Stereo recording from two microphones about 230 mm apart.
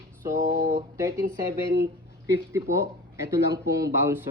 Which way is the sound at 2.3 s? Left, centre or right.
Centre.